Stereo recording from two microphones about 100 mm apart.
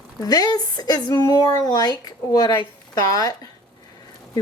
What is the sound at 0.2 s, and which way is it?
Speech, 40° left (ahead or behind).